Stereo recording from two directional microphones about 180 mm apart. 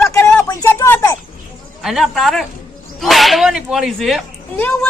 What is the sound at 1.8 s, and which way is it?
Speech, centre (ahead or behind).